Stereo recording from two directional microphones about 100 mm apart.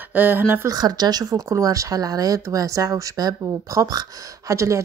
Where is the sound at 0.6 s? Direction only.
40° right (ahead or behind).